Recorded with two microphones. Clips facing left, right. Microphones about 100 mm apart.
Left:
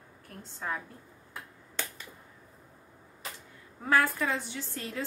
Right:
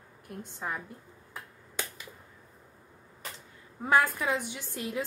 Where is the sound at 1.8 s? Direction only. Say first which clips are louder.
Even; 10° right (ahead or behind).